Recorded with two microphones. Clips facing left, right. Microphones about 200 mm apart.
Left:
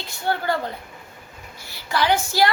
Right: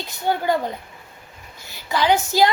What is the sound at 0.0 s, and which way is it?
Speech, 15° right (ahead or behind).